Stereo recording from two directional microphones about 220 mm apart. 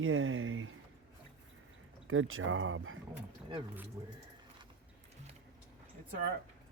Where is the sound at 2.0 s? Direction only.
65° right (ahead or behind).